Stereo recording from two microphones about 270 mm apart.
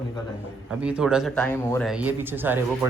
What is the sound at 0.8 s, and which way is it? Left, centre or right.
A man's voice, centre.